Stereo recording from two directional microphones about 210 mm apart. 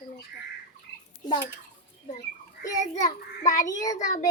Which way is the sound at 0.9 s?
55° left (ahead or behind).